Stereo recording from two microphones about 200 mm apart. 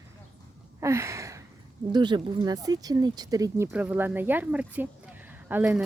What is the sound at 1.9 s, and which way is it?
Speech, 20° right (ahead or behind).